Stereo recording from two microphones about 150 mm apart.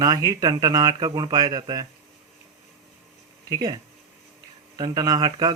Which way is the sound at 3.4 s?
25° right (ahead or behind).